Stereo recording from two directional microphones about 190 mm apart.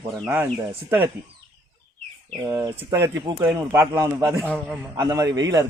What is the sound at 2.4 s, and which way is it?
A man's voice, 20° right (ahead or behind).